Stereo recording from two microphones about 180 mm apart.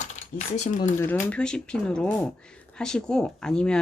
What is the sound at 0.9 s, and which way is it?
Speech, 10° left (ahead or behind).